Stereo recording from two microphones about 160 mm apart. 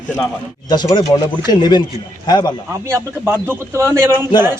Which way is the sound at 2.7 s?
15° right (ahead or behind).